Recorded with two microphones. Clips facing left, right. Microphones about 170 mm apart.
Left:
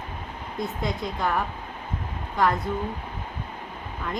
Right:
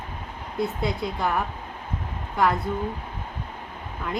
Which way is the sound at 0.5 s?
5° right (ahead or behind).